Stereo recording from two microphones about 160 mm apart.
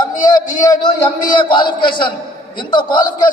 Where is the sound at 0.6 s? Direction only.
20° left (ahead or behind).